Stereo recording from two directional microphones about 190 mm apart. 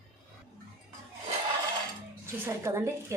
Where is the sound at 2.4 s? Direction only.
15° right (ahead or behind).